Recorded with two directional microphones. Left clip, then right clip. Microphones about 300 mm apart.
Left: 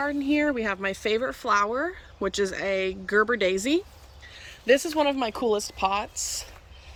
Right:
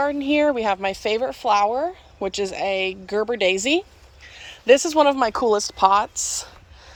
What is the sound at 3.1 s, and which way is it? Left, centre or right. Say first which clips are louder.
Speech: left 3 dB; right.